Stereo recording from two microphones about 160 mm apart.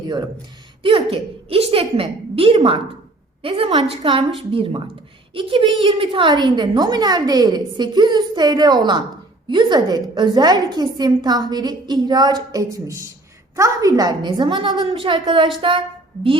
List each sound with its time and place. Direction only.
0.8 s a woman's voice: 35° right (ahead or behind)